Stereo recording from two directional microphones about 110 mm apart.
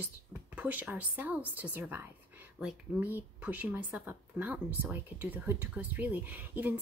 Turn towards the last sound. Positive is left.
turn(degrees=-15)  # may be behind; listen again after turning